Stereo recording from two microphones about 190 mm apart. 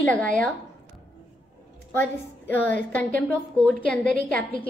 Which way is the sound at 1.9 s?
10° left (ahead or behind).